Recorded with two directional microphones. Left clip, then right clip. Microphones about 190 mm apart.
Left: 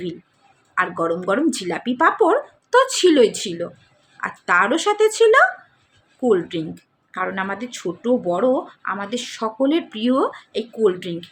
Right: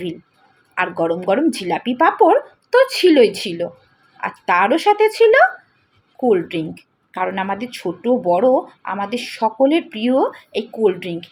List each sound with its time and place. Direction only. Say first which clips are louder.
0.8 s speech: right 2 dB; 5° right (ahead or behind)
9.0 s speech: right 2 dB; 35° left (ahead or behind)
9.4 s speech: right 5 dB; 5° right (ahead or behind)